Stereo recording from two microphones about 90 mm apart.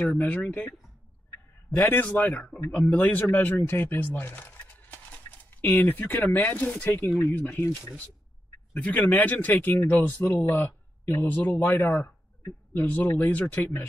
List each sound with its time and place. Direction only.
0.0 s speech: 15° left (ahead or behind)
1.8 s speech: 20° left (ahead or behind)
8.7 s speech: 15° left (ahead or behind)